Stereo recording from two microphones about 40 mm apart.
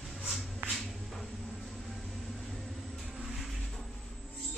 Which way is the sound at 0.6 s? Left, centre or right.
Right.